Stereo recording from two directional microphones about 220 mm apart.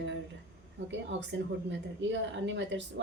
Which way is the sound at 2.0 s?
55° right (ahead or behind).